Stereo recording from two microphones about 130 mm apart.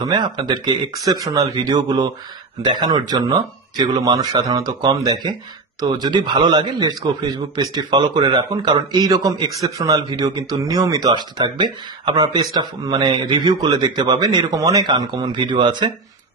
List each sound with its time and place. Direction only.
0.1 s a man's voice: 35° right (ahead or behind)